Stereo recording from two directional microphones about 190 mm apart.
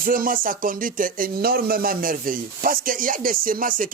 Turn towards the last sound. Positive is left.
turn(degrees=-45)  # may be behind; listen again after turning